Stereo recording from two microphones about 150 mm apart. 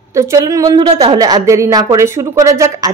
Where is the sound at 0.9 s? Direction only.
40° right (ahead or behind).